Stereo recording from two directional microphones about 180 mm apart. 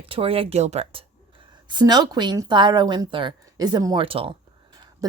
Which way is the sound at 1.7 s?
25° right (ahead or behind).